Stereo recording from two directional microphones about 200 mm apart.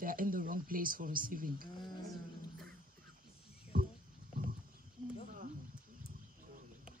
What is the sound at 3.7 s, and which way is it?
Music, 45° right (ahead or behind).